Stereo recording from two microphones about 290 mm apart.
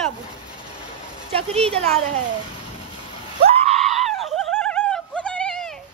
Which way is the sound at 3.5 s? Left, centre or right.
Right.